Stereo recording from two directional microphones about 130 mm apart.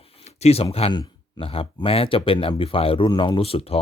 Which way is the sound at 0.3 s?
55° left (ahead or behind).